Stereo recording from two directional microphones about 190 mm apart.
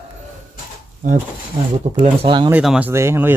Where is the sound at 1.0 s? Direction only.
45° right (ahead or behind).